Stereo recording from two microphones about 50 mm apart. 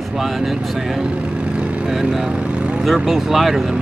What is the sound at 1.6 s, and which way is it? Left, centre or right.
Vehicle, right.